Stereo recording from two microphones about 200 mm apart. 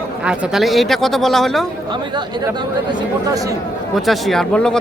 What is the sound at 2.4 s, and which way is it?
Speech, 15° right (ahead or behind).